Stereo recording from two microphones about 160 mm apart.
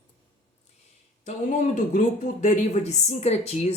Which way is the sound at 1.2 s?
50° left (ahead or behind).